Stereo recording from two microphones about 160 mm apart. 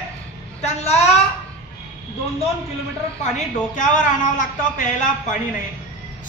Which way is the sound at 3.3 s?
50° left (ahead or behind).